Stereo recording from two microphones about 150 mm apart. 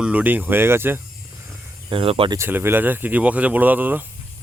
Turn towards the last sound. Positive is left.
turn(degrees=-10)  # may be behind; listen again after turning